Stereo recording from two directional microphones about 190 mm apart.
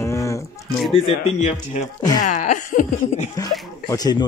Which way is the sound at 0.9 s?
35° left (ahead or behind).